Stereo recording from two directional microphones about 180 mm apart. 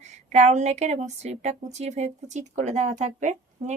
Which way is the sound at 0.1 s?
40° right (ahead or behind).